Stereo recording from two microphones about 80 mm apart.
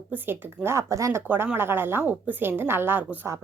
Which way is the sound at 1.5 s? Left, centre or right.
Right.